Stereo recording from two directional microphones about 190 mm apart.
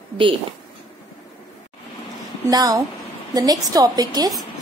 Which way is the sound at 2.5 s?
20° right (ahead or behind).